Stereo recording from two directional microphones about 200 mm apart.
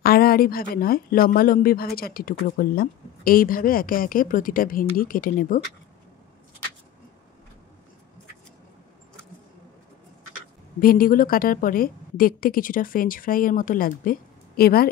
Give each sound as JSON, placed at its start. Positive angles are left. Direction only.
{"t": 0.0, "sound": "speech", "side_deg": 50}
{"t": 10.8, "sound": "speech", "side_deg": 45}